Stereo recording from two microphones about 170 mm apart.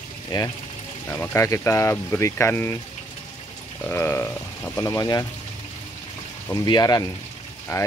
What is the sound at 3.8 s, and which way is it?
Speech, 15° left (ahead or behind).